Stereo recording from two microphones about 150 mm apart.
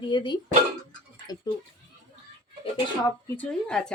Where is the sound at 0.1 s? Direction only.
30° left (ahead or behind).